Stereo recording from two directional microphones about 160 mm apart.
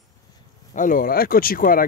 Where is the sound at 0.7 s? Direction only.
55° left (ahead or behind).